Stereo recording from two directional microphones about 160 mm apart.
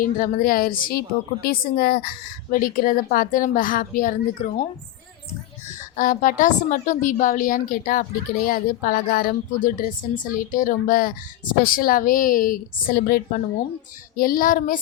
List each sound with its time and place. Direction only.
0.0 s speech: 60° left (ahead or behind)
5.6 s speech: 55° left (ahead or behind); by 13.4 s 75° left (ahead or behind)
14.2 s speech: 60° left (ahead or behind)